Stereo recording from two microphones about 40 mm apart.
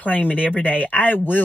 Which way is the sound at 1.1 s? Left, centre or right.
Left.